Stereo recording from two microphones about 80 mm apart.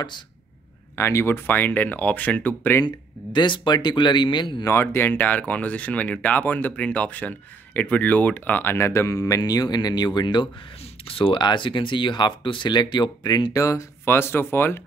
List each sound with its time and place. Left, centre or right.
0.9 s speech: left
3.3 s speech: left
4.6 s speech: left
8.7 s speech: left
11.1 s speech: left